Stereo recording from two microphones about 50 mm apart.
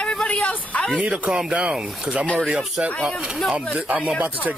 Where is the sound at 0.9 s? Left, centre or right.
Right.